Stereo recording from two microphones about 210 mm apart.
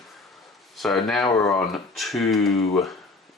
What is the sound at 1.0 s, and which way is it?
Speech, centre (ahead or behind).